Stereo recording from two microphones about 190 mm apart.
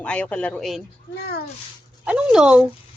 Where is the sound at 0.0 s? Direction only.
5° left (ahead or behind).